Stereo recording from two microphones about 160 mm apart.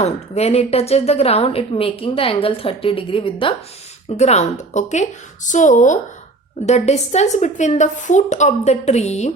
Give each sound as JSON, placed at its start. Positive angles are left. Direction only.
{"t": 0.0, "sound": "a woman's voice", "side_deg": 40}
{"t": 4.2, "sound": "a woman's voice", "side_deg": 45}